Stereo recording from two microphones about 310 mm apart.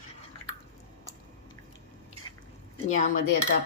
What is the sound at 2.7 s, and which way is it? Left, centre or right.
Speech, left.